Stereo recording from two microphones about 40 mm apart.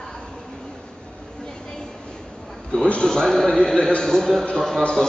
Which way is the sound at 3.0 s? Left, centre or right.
Centre.